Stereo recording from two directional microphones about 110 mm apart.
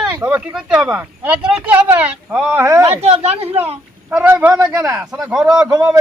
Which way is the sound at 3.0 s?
70° right (ahead or behind).